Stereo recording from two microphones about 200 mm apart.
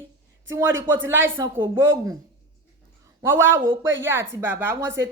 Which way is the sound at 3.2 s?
10° right (ahead or behind).